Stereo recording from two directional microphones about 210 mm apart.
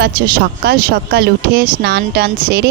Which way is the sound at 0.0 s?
45° right (ahead or behind).